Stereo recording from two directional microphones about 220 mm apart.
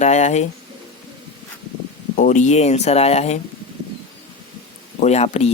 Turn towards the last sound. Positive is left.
turn(degrees=30)  # may be behind; listen again after turning